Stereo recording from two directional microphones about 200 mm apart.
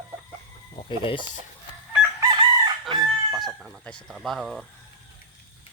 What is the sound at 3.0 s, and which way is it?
Speech, centre (ahead or behind).